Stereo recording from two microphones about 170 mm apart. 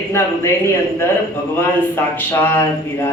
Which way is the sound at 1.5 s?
15° left (ahead or behind).